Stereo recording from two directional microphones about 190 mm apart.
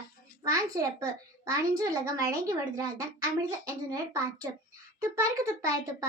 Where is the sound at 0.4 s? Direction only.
15° right (ahead or behind).